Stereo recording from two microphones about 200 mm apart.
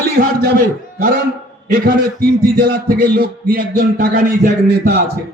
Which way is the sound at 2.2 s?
50° right (ahead or behind).